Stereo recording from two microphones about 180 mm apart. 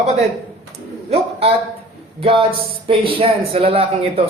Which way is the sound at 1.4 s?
35° right (ahead or behind).